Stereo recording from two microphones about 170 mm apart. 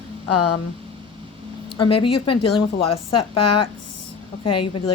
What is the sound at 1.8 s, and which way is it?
A woman's voice, 30° left (ahead or behind).